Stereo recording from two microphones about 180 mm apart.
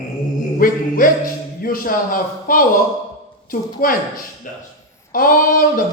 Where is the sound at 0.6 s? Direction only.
50° left (ahead or behind).